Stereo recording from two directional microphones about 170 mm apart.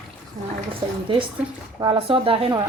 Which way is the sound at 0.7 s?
30° right (ahead or behind).